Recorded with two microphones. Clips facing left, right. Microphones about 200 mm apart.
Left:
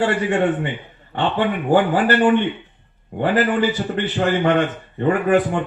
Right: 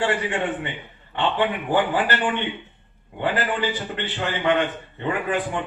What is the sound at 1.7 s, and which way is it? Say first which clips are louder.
Speech: left 8 dB; 45° left (ahead or behind).